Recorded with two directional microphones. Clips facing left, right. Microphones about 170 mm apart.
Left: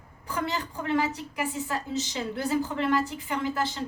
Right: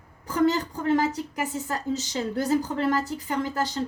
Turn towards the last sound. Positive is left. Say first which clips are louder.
# right 2 dB
turn(degrees=-40)  # may be behind; listen again after turning